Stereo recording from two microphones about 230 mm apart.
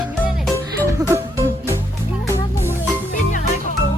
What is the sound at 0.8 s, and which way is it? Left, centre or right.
Music, centre.